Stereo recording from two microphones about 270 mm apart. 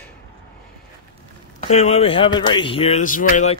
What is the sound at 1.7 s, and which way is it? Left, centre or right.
Speech, left.